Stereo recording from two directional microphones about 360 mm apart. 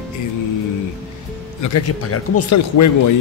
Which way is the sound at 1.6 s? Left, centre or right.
Left.